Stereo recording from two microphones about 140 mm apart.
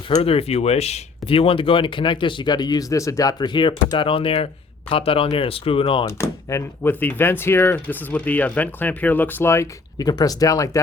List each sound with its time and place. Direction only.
0.2 s speech: 45° left (ahead or behind)
6.1 s speech: 20° left (ahead or behind)